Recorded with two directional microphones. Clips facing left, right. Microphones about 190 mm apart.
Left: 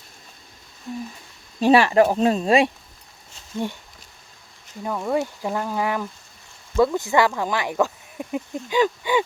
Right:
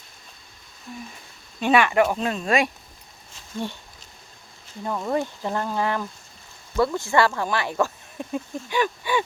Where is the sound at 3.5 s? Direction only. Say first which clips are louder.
Left 3 dB; 20° left (ahead or behind).